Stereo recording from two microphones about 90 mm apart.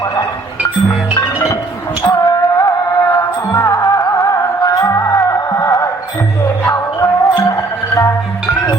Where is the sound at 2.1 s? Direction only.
40° left (ahead or behind).